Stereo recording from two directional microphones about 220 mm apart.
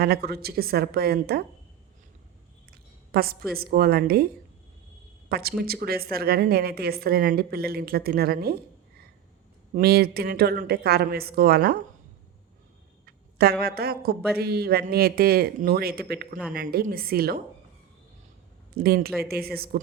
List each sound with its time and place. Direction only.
0.0 s a woman's voice: 45° right (ahead or behind)
2.6 s a woman's voice: 45° right (ahead or behind)
5.3 s a woman's voice: 45° right (ahead or behind)
9.7 s a woman's voice: 45° right (ahead or behind)
13.1 s a woman's voice: 45° right (ahead or behind)
18.8 s a woman's voice: 45° right (ahead or behind)